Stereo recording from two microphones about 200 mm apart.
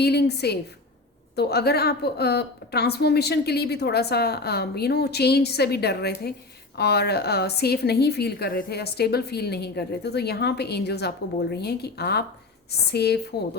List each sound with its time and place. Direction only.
0.0 s a woman's voice: 55° left (ahead or behind)